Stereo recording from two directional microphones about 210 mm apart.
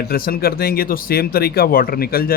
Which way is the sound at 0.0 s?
45° left (ahead or behind).